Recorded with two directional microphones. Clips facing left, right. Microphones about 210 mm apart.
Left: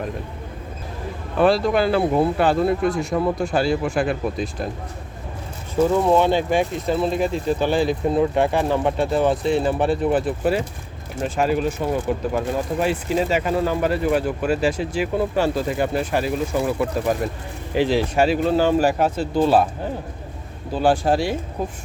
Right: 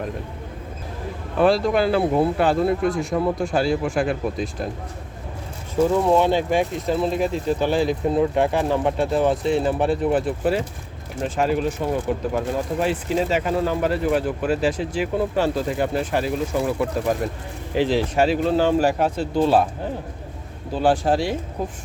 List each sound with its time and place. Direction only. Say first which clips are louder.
1.4 s speech: even; centre (ahead or behind)
6.1 s speech: left 1 dB; centre (ahead or behind)
20.7 s speech: left 1 dB; 10° left (ahead or behind)